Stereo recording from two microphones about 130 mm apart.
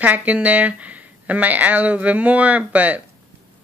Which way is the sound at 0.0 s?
10° right (ahead or behind).